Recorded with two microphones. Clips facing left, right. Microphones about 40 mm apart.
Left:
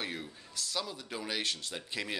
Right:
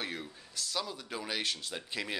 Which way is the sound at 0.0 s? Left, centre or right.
Centre.